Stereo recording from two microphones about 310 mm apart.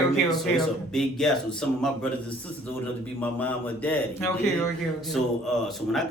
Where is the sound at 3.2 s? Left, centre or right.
Centre.